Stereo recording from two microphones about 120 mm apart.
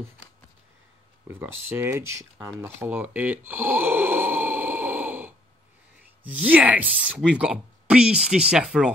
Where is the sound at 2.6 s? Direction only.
15° right (ahead or behind).